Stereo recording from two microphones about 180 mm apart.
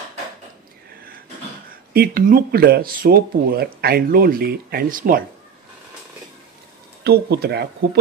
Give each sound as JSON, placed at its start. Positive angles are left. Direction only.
{"t": 2.0, "sound": "speech", "side_deg": -55}
{"t": 7.0, "sound": "speech", "side_deg": -65}